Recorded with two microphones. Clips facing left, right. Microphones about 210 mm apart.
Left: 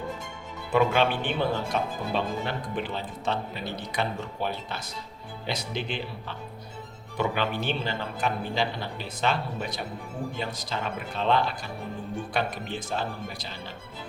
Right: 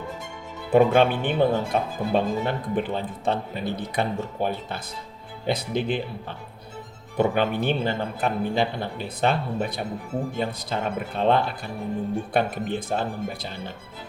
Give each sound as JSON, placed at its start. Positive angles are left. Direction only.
{"t": 0.7, "sound": "a man's voice", "side_deg": -50}